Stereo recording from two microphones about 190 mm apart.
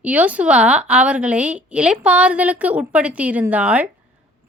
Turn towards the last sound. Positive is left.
turn(degrees=-5)  # may be behind; listen again after turning